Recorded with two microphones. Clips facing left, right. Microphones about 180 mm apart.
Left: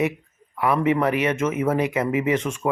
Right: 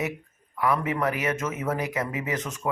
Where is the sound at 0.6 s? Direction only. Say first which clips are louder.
Left 5 dB; 25° left (ahead or behind).